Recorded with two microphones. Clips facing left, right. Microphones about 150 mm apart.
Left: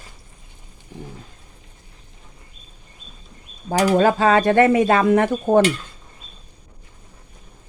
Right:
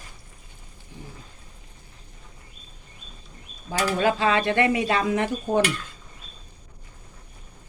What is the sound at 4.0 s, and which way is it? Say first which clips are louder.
Speech: left 3 dB; 45° left (ahead or behind).